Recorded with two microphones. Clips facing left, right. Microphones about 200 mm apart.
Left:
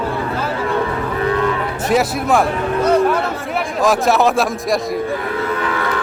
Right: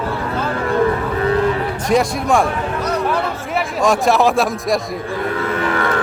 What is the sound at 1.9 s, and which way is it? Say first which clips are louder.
Speech: even; 5° left (ahead or behind).